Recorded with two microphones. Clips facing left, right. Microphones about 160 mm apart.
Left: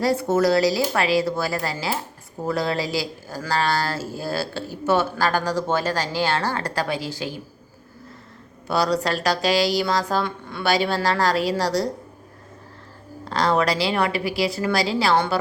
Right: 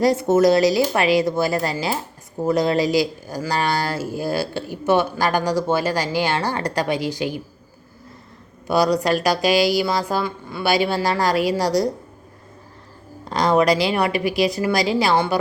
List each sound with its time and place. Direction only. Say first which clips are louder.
0.0 s speech: right 4 dB; 20° right (ahead or behind)
8.6 s speech: right 4 dB; 15° right (ahead or behind)
13.2 s speech: right 4 dB; 15° right (ahead or behind)